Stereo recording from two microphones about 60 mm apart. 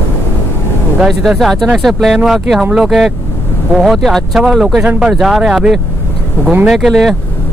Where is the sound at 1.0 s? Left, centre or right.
Centre.